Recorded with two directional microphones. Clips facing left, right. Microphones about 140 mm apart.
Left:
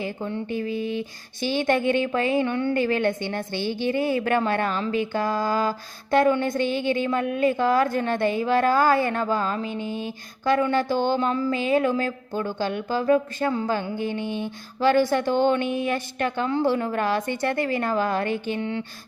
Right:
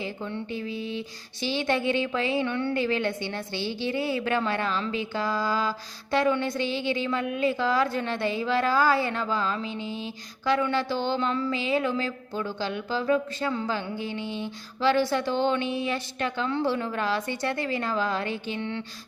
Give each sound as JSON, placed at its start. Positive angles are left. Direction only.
{"t": 0.0, "sound": "a woman's voice", "side_deg": 45}